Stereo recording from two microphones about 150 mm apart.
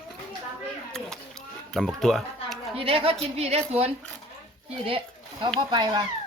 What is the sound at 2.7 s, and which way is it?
A woman's voice, 40° right (ahead or behind).